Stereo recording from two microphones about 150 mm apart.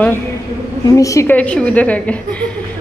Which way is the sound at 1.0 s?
20° left (ahead or behind).